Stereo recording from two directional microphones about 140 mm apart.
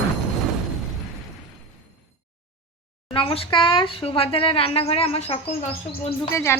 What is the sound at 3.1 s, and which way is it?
A woman's voice, 40° left (ahead or behind).